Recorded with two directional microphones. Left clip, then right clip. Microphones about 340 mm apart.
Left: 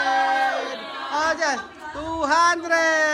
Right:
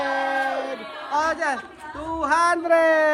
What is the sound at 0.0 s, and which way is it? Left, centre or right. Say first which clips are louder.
Music: left 4 dB; centre.